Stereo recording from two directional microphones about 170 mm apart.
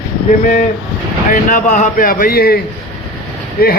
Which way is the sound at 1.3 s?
50° left (ahead or behind).